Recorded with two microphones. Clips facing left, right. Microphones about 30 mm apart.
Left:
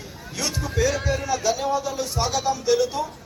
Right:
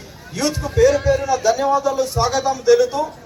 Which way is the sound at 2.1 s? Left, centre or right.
Centre.